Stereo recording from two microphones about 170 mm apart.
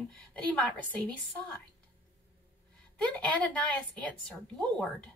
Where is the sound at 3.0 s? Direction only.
5° left (ahead or behind).